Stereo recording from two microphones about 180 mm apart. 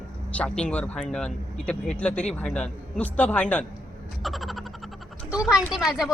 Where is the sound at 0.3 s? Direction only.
5° left (ahead or behind).